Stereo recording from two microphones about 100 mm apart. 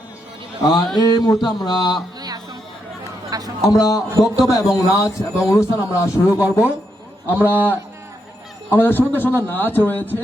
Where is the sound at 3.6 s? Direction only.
35° left (ahead or behind).